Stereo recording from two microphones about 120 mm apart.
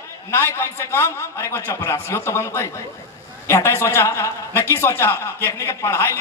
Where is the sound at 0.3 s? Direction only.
20° left (ahead or behind).